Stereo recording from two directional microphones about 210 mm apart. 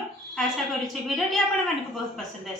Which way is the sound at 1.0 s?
Centre (ahead or behind).